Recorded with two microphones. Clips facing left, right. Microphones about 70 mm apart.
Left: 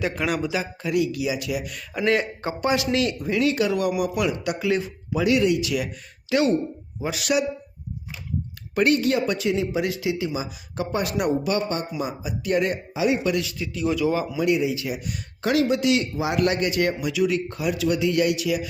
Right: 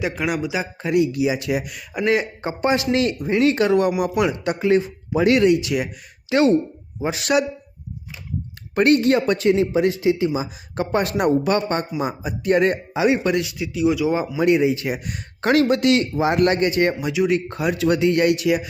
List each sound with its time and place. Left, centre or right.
0.0 s speech: centre
1.6 s speech: centre; by 5.2 s right
5.2 s speech: right
5.6 s speech: right
8.7 s speech: right
13.3 s speech: right
13.6 s speech: centre
14.1 s speech: right
14.4 s speech: right